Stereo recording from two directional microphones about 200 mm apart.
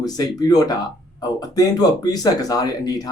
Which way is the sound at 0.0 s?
20° left (ahead or behind).